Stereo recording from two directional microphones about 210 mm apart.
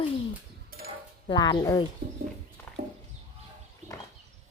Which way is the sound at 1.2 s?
20° left (ahead or behind).